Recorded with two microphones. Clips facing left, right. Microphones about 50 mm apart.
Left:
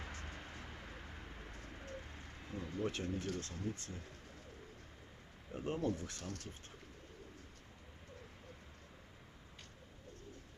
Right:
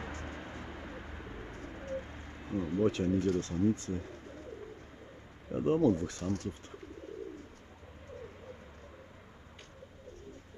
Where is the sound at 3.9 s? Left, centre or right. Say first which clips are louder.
Right 11 dB; right.